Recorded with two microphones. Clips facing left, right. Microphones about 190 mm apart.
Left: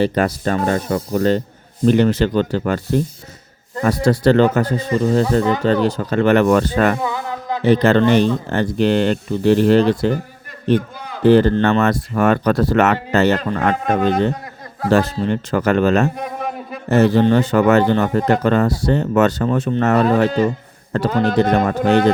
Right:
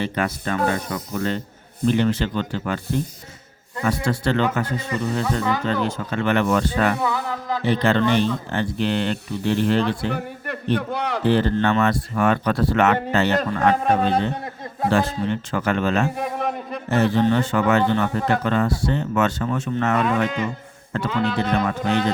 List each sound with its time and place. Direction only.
0.0 s speech: 35° left (ahead or behind)
7.0 s a sound: 20° left (ahead or behind)
7.7 s speech: 45° left (ahead or behind)
10.2 s a sound: 65° right (ahead or behind)
10.8 s a man's voice: 70° right (ahead or behind)
11.2 s speech: 45° left (ahead or behind)
13.8 s a man's voice: 30° right (ahead or behind)
14.8 s speech: 40° left (ahead or behind)
16.1 s a sound: centre (ahead or behind)
16.9 s speech: 40° left (ahead or behind)